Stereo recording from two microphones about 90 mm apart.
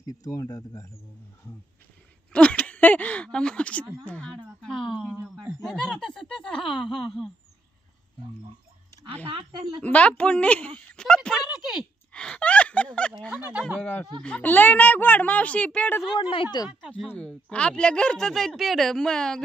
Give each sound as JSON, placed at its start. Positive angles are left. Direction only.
{"t": 0.0, "sound": "speech", "side_deg": 40}
{"t": 2.3, "sound": "speech", "side_deg": 15}
{"t": 9.3, "sound": "speech", "side_deg": -70}
{"t": 9.8, "sound": "speech", "side_deg": 15}
{"t": 11.3, "sound": "speech", "side_deg": -5}
{"t": 12.1, "sound": "speech", "side_deg": 10}
{"t": 13.3, "sound": "speech", "side_deg": -15}
{"t": 13.7, "sound": "speech", "side_deg": 20}
{"t": 16.1, "sound": "speech", "side_deg": 70}
{"t": 17.2, "sound": "speech", "side_deg": 10}